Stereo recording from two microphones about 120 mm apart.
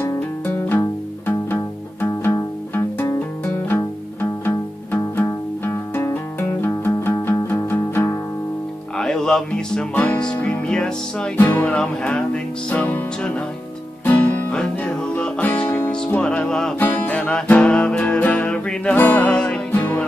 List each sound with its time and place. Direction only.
0.7 s music: 15° left (ahead or behind)
8.9 s music: 5° left (ahead or behind)
16.8 s music: 15° left (ahead or behind)